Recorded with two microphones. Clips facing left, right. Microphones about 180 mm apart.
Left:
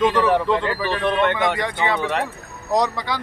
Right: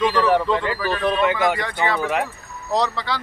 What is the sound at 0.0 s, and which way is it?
Speech, centre (ahead or behind).